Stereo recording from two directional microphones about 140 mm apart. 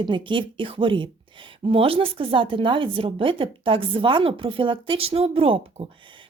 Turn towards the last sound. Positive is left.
turn(degrees=-35)  # may be behind; listen again after turning